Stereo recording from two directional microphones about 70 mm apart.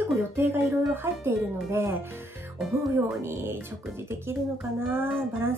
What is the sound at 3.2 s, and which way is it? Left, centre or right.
Speech, right.